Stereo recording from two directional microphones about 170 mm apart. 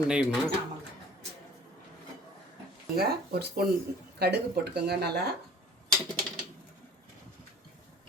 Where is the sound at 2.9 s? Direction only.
70° right (ahead or behind).